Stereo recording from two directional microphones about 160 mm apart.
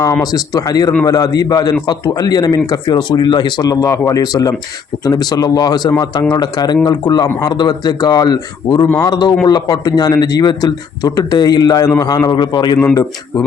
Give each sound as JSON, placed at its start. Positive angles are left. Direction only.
{"t": 0.3, "sound": "speech", "side_deg": 25}
{"t": 12.8, "sound": "speech", "side_deg": 15}